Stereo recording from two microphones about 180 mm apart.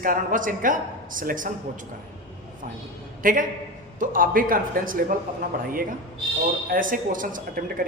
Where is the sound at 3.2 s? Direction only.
50° right (ahead or behind).